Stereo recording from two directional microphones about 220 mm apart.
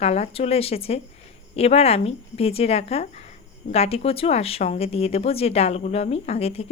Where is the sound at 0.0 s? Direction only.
30° left (ahead or behind).